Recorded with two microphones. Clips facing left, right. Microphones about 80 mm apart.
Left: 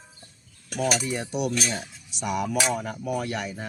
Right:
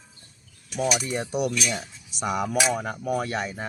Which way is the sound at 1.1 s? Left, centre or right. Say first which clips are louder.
Right 1 dB; right.